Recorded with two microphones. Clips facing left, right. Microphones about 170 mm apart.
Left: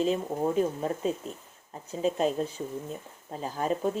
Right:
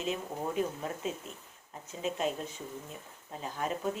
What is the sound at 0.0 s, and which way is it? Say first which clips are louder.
Speech: left 8 dB; 35° left (ahead or behind).